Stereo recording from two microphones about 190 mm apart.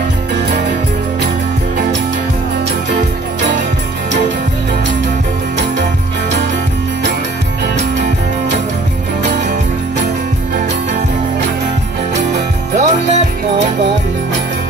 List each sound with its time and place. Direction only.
12.2 s music: 40° right (ahead or behind)